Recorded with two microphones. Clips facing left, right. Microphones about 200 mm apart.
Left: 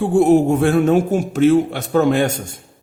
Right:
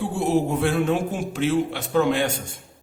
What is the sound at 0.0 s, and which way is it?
A man's voice, 50° left (ahead or behind).